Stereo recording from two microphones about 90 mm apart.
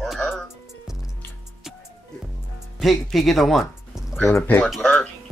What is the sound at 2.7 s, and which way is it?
Speech, centre (ahead or behind).